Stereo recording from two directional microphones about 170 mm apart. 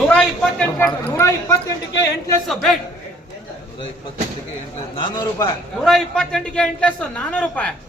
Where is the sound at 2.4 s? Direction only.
Centre (ahead or behind).